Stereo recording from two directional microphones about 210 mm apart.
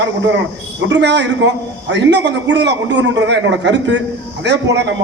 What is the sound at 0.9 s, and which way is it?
A man's voice, 60° right (ahead or behind).